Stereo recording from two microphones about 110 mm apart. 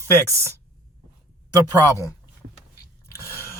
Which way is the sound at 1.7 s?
25° left (ahead or behind).